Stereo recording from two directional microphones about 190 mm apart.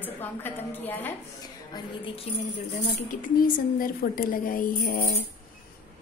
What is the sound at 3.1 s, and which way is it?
A woman's voice, 50° left (ahead or behind).